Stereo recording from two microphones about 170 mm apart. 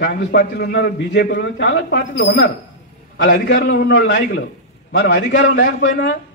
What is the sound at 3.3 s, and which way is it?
A man's voice, 70° left (ahead or behind).